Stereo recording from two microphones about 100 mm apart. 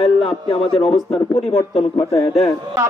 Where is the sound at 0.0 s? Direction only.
75° left (ahead or behind).